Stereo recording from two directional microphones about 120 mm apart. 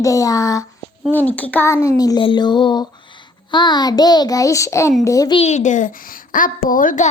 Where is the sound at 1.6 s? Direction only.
25° left (ahead or behind).